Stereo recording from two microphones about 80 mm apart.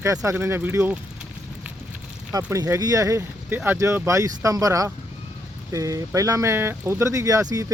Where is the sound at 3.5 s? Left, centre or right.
Right.